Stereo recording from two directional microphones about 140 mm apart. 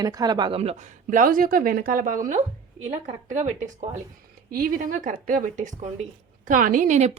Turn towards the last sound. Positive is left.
turn(degrees=-55)  # may be behind; listen again after turning